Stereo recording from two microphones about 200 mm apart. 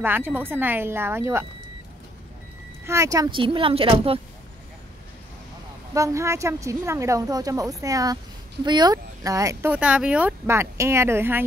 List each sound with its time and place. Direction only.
0.0 s speech: 10° right (ahead or behind)
2.8 s speech: 15° right (ahead or behind)
5.9 s speech: 15° right (ahead or behind)